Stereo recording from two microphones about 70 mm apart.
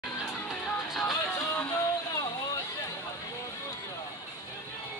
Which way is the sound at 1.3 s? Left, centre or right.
Left.